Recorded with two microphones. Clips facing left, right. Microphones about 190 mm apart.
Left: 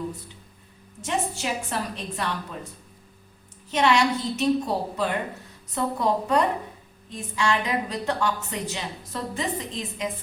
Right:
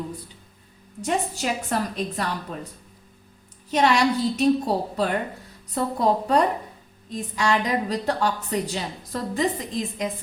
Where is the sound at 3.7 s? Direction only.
40° right (ahead or behind).